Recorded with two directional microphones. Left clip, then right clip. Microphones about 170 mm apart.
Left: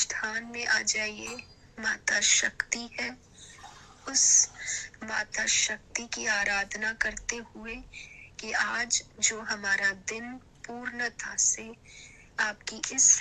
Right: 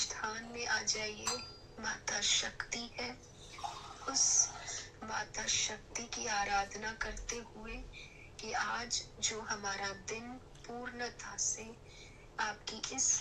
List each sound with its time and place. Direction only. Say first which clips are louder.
0.0 s speech: left 8 dB; 40° left (ahead or behind)